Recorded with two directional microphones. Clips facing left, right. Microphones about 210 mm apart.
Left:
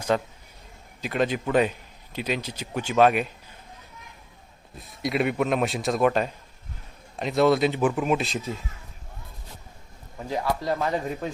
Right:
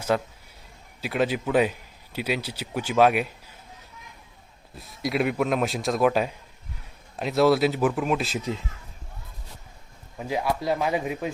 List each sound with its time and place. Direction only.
0.1 s speech: 5° right (ahead or behind)
5.0 s speech: centre (ahead or behind)
8.4 s speech: 20° right (ahead or behind)
10.2 s speech: 10° right (ahead or behind)